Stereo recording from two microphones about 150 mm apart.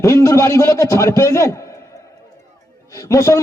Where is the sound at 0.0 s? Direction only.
20° left (ahead or behind).